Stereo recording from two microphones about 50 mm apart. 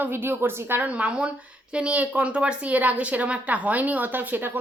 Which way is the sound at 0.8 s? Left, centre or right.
Right.